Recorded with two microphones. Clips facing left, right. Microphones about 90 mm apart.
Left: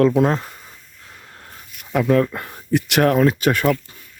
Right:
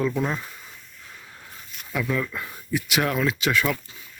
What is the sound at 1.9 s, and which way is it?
Speech, 55° left (ahead or behind).